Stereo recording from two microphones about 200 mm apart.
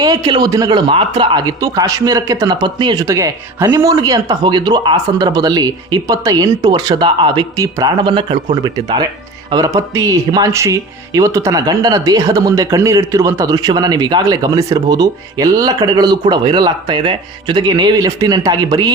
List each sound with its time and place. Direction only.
0.0 s speech: 20° right (ahead or behind)